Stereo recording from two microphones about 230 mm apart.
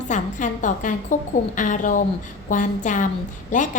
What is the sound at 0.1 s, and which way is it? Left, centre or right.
A woman's voice, left.